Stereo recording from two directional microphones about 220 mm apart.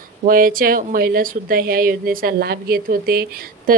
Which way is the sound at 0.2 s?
40° right (ahead or behind).